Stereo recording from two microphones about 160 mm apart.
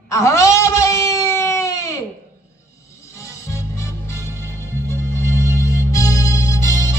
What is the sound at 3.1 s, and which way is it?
Music, 20° left (ahead or behind).